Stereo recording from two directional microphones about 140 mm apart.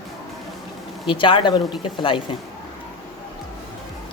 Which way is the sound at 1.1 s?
35° left (ahead or behind).